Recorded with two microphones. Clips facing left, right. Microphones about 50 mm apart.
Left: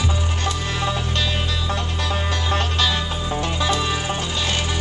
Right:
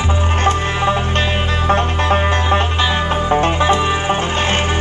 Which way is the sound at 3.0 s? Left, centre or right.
Right.